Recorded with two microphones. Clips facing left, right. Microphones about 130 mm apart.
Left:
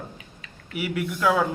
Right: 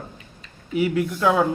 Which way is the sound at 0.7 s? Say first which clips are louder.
Right 6 dB; 30° right (ahead or behind).